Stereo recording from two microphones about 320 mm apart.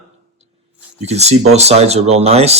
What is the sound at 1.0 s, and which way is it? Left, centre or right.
Speech, centre.